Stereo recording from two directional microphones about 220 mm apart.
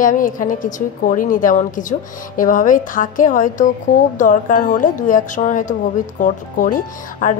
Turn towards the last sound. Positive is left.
turn(degrees=35)  # may be behind; listen again after turning